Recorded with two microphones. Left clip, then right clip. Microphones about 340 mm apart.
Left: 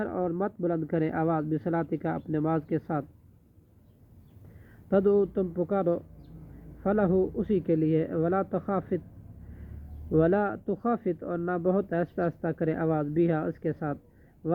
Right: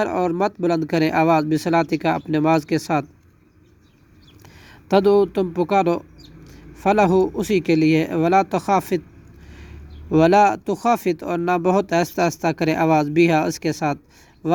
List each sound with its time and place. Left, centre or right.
0.0 s speech: right
4.9 s speech: right
10.1 s speech: right